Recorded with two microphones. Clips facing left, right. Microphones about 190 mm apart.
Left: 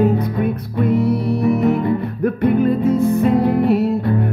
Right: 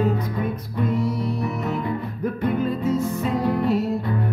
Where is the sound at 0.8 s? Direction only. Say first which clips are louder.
Left 7 dB; 60° left (ahead or behind).